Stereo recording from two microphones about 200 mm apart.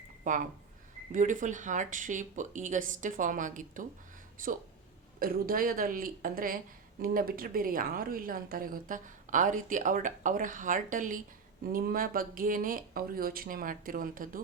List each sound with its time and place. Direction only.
0.3 s a woman's voice: 40° right (ahead or behind)